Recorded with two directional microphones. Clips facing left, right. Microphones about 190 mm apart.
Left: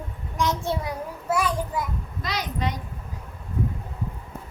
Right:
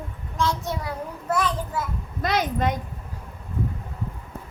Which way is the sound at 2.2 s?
50° right (ahead or behind).